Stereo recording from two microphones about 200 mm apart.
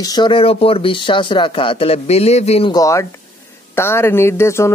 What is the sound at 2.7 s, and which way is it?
Speech, 15° left (ahead or behind).